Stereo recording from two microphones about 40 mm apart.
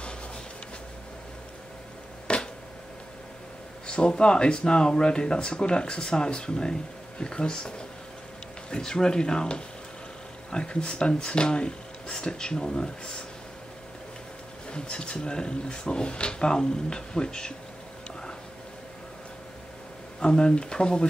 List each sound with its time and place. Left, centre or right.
2.3 s a sound: left
3.8 s speech: left
14.7 s speech: left
20.2 s speech: centre